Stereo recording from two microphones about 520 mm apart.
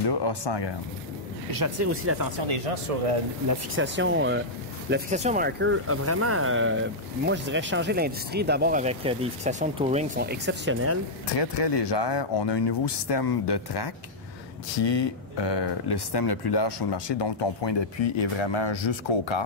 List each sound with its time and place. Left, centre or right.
0.0 s speech: left
1.6 s speech: right
2.4 s speech: right
3.7 s speech: right
11.3 s speech: left